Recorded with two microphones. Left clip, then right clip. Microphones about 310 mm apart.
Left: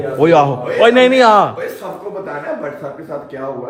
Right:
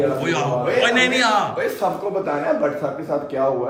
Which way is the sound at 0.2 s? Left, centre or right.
Centre.